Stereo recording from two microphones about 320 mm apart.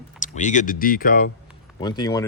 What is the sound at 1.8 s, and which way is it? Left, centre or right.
Speech, centre.